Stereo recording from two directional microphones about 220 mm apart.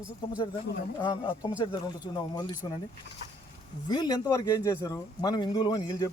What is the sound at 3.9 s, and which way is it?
Speech, 20° left (ahead or behind).